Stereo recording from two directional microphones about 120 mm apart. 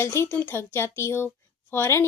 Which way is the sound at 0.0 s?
20° left (ahead or behind).